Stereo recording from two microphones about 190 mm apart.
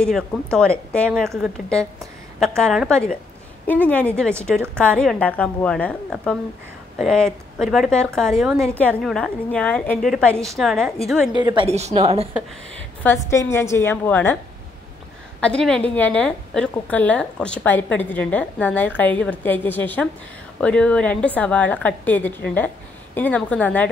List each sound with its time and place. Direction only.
0.0 s a woman's voice: 5° left (ahead or behind)
11.3 s a woman's voice: 25° right (ahead or behind)
13.0 s a woman's voice: 15° left (ahead or behind)
15.4 s a woman's voice: 5° left (ahead or behind)